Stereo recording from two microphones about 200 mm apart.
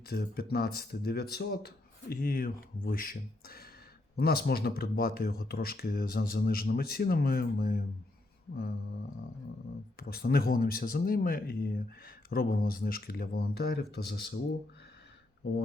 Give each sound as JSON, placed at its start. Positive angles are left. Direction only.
{"t": 0.1, "sound": "speech", "side_deg": 50}
{"t": 10.0, "sound": "speech", "side_deg": 50}